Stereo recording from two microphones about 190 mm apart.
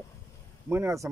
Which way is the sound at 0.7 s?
15° right (ahead or behind).